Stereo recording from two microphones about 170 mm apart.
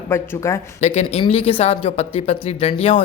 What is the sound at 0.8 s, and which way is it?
A woman's voice, 40° left (ahead or behind).